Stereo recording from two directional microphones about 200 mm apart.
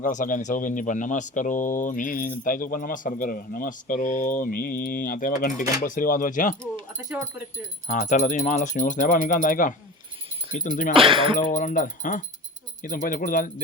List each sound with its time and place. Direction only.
0.0 s speech: 40° left (ahead or behind)
7.9 s speech: 40° left (ahead or behind)
10.9 s speech: 25° right (ahead or behind)
11.3 s speech: 40° left (ahead or behind)